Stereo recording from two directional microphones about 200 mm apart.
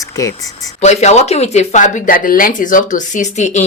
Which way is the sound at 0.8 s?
35° left (ahead or behind).